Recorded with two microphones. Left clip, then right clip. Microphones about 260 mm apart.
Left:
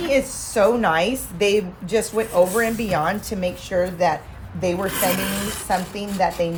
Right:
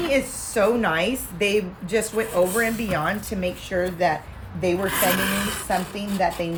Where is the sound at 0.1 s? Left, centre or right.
Centre.